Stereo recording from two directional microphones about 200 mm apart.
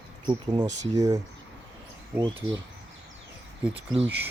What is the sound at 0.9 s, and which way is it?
Speech, 15° right (ahead or behind).